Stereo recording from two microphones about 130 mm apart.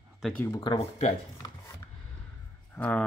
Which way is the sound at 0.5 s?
30° left (ahead or behind).